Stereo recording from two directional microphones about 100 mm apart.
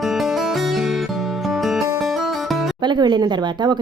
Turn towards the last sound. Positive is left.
turn(degrees=-45)  # may be behind; listen again after turning